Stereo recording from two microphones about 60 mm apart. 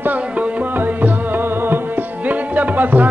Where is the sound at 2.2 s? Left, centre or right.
Right.